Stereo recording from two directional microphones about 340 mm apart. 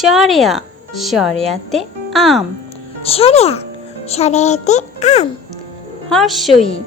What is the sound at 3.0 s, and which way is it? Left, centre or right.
A child's voice, centre.